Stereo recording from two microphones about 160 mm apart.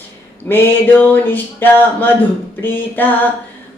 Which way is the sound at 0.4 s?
10° left (ahead or behind).